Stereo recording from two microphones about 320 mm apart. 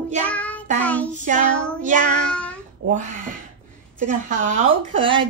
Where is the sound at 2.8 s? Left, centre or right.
Right.